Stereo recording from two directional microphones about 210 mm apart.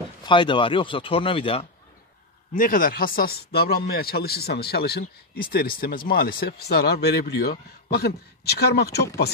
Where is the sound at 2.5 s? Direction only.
40° left (ahead or behind).